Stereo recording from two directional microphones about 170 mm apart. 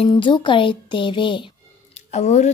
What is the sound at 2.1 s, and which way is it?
Speech, 40° left (ahead or behind).